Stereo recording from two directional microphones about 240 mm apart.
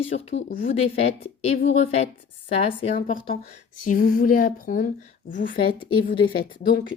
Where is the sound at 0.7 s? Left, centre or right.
Left.